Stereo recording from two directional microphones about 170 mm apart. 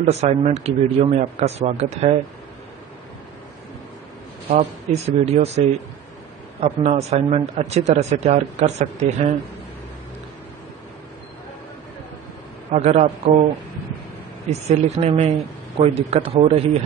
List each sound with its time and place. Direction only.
0.0 s speech: 40° right (ahead or behind)
4.5 s speech: 40° right (ahead or behind)
6.6 s speech: 40° right (ahead or behind)
12.7 s speech: 40° right (ahead or behind)
14.5 s speech: 40° right (ahead or behind)